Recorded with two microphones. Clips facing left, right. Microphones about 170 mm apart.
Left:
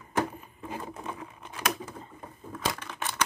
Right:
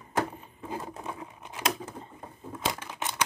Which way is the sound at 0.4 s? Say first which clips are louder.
Right 1 dB; 25° right (ahead or behind).